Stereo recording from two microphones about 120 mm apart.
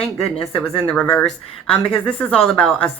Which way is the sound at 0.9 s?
10° left (ahead or behind).